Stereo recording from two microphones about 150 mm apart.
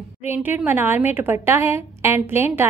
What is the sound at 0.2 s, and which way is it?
A woman's voice, 15° right (ahead or behind).